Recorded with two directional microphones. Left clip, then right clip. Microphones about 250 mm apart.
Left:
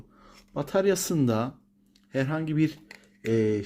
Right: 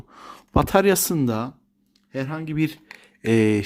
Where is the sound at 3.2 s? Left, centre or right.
Right.